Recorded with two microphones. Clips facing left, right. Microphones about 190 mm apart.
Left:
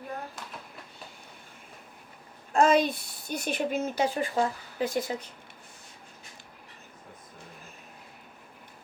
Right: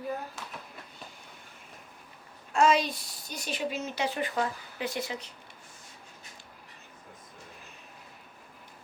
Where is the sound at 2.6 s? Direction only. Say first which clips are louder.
Left 2 dB; 55° left (ahead or behind).